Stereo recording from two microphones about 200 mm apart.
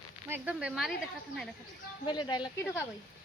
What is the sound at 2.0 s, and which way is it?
Speech, 20° left (ahead or behind).